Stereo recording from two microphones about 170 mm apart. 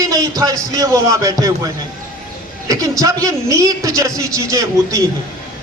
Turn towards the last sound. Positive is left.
turn(degrees=-20)  # may be behind; listen again after turning